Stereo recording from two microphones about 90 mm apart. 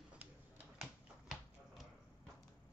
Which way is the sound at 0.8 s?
Centre (ahead or behind).